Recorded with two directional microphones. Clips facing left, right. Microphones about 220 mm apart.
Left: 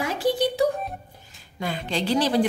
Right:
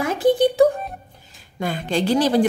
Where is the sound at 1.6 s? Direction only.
50° right (ahead or behind).